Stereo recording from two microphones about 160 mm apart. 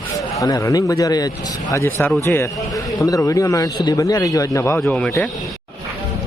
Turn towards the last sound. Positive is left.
turn(degrees=5)  # may be behind; listen again after turning